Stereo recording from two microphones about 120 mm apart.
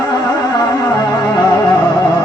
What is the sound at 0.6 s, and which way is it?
Music, 35° left (ahead or behind).